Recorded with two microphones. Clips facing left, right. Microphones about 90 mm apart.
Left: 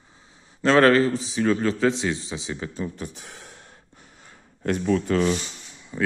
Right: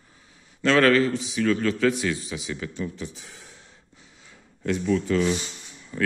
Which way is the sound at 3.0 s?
60° left (ahead or behind).